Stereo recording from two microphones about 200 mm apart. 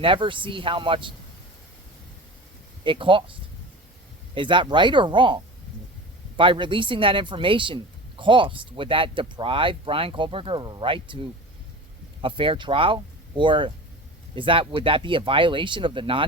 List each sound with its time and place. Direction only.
0.0 s speech: 25° right (ahead or behind)
2.8 s speech: 25° right (ahead or behind)
4.4 s speech: 25° right (ahead or behind)